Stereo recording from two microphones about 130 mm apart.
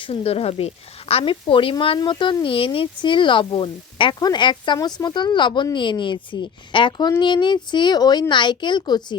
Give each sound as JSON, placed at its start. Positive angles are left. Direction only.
{"t": 0.0, "sound": "speech", "side_deg": 50}